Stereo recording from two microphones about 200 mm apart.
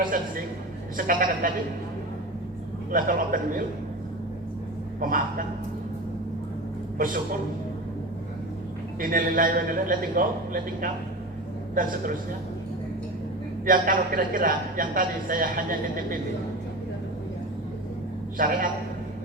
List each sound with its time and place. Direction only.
0.0 s a man's voice: 45° right (ahead or behind)
2.9 s a man's voice: 45° right (ahead or behind)
4.9 s a man's voice: 45° right (ahead or behind)
9.0 s a man's voice: 45° right (ahead or behind)
13.7 s a man's voice: 45° right (ahead or behind)
18.3 s a man's voice: 45° right (ahead or behind)